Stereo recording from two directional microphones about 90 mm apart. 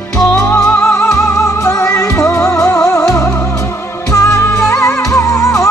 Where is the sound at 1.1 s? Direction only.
35° left (ahead or behind).